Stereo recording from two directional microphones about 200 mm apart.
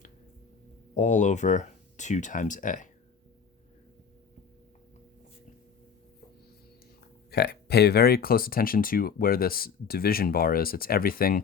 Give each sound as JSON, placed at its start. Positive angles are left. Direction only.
{"t": 0.9, "sound": "speech", "side_deg": 35}
{"t": 7.3, "sound": "speech", "side_deg": 55}